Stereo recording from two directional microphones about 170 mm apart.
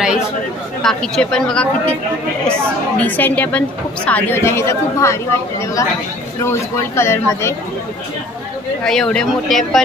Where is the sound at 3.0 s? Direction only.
10° left (ahead or behind).